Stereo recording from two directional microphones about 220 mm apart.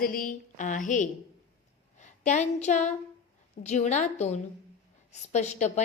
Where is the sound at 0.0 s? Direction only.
40° left (ahead or behind).